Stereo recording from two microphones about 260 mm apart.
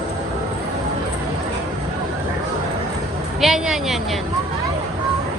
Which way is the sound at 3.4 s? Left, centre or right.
Centre.